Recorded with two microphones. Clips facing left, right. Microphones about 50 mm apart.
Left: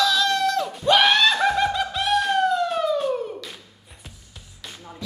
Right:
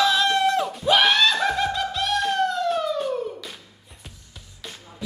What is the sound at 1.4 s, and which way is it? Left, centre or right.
Music, centre.